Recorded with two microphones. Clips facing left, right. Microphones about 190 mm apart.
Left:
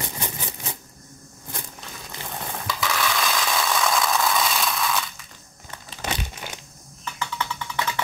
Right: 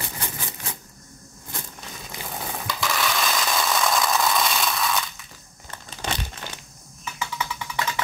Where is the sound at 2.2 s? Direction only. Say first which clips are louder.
Right 1 dB; 5° right (ahead or behind).